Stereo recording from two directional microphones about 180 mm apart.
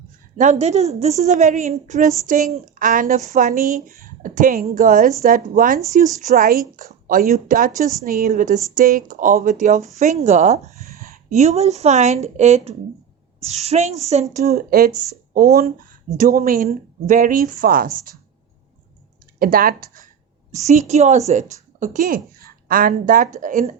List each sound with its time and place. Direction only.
0.3 s a woman's voice: 40° right (ahead or behind)
14.5 s a woman's voice: 55° right (ahead or behind)
19.4 s a woman's voice: 55° right (ahead or behind)
20.5 s a woman's voice: 40° right (ahead or behind)